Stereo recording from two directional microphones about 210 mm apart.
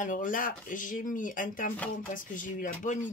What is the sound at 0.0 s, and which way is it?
Speech, 40° left (ahead or behind).